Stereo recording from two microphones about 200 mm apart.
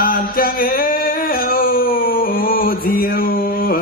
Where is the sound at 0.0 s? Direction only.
45° left (ahead or behind).